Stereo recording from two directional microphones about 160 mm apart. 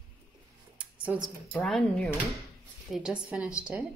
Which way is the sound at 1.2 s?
5° left (ahead or behind).